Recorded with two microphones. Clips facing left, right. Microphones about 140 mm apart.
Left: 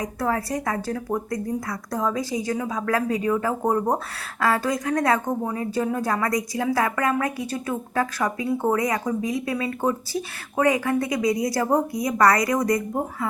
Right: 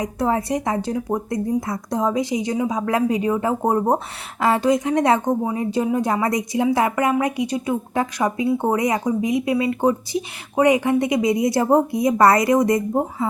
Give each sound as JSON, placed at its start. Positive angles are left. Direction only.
{"t": 0.0, "sound": "speech", "side_deg": -20}